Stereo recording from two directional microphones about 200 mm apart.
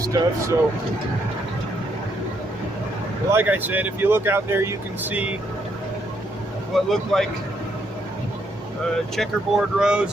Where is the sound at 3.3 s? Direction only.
10° right (ahead or behind).